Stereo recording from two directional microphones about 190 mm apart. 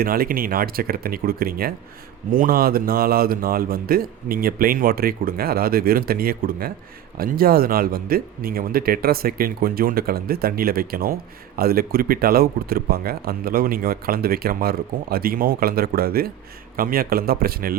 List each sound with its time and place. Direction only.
0.0 s speech: 50° right (ahead or behind)